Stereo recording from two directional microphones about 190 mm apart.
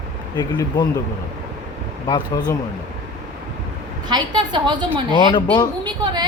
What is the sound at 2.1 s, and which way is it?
Speech, 20° left (ahead or behind).